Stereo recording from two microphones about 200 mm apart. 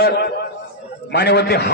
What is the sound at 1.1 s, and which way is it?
Speech, 55° left (ahead or behind).